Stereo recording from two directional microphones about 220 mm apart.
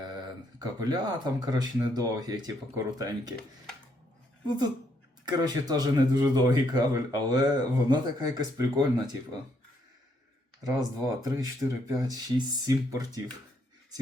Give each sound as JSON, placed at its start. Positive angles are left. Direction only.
{"t": 0.6, "sound": "speech", "side_deg": -20}
{"t": 4.4, "sound": "speech", "side_deg": -20}
{"t": 10.7, "sound": "speech", "side_deg": -15}